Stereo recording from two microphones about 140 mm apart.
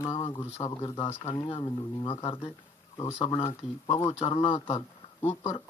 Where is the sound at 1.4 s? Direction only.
40° left (ahead or behind).